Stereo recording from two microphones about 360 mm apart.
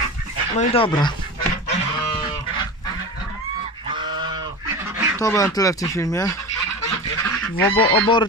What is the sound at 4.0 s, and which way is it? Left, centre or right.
Goose, centre.